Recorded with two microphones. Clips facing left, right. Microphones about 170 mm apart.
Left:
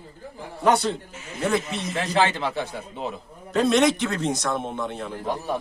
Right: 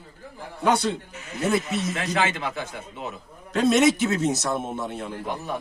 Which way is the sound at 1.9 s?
35° left (ahead or behind).